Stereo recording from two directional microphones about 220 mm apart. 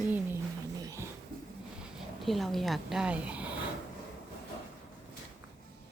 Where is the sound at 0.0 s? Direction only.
10° right (ahead or behind).